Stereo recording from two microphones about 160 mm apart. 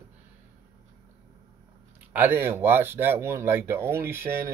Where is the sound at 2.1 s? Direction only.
15° right (ahead or behind).